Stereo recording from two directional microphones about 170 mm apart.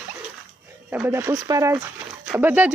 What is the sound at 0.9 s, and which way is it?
Speech, 15° right (ahead or behind).